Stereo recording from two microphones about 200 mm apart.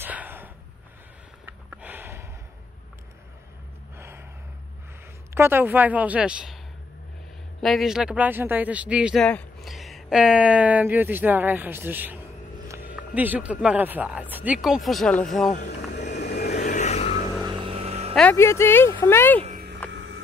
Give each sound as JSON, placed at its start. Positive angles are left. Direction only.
{"t": 0.0, "sound": "a sound", "side_deg": -10}
{"t": 3.9, "sound": "gasp", "side_deg": -10}
{"t": 5.3, "sound": "speech", "side_deg": -10}
{"t": 7.6, "sound": "speech", "side_deg": 0}
{"t": 15.9, "sound": "vehicle", "side_deg": 55}
{"t": 16.5, "sound": "vehicle", "side_deg": 40}
{"t": 17.5, "sound": "vehicle", "side_deg": -25}
{"t": 18.1, "sound": "speech", "side_deg": 10}
{"t": 19.4, "sound": "a sound", "side_deg": -40}
{"t": 19.9, "sound": "vehicle", "side_deg": -70}